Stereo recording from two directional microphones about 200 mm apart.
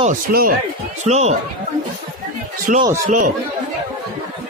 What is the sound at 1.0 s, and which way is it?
Speech, 35° right (ahead or behind).